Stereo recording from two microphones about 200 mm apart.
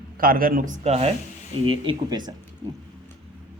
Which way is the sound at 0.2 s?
45° right (ahead or behind).